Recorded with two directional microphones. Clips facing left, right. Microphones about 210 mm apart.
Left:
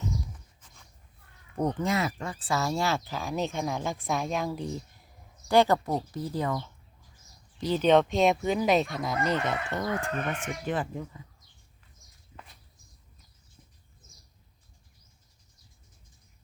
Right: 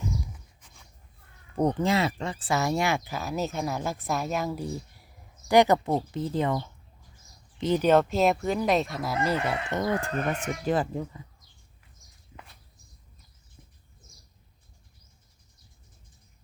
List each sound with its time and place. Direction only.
1.5 s speech: 30° right (ahead or behind); by 4.8 s 10° right (ahead or behind)
5.5 s speech: 20° right (ahead or behind)
7.8 s speech: 5° right (ahead or behind)
10.0 s speech: 40° right (ahead or behind)